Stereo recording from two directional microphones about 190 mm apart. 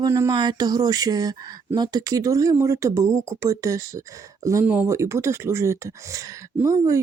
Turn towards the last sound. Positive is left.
turn(degrees=-15)  # may be behind; listen again after turning